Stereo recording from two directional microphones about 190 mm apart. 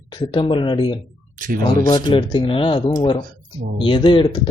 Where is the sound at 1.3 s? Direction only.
45° right (ahead or behind).